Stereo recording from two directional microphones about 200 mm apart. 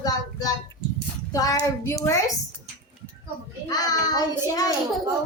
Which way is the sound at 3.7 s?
20° left (ahead or behind).